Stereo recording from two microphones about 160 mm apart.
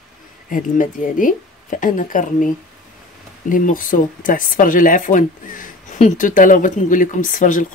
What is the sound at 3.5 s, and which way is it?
Speech, 60° left (ahead or behind).